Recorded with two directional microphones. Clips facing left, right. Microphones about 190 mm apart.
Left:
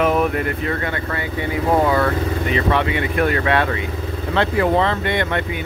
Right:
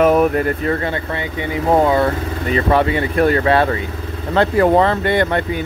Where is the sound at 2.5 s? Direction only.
40° right (ahead or behind).